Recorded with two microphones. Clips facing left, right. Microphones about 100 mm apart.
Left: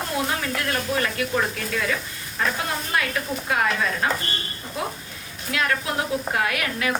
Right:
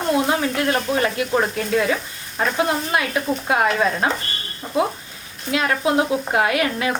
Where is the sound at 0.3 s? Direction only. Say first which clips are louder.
Right 6 dB; 30° right (ahead or behind).